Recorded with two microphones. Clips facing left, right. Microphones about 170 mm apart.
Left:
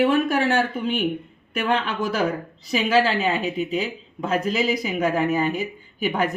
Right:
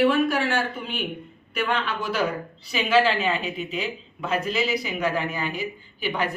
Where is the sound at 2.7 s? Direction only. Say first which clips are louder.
Left 1 dB; 35° left (ahead or behind).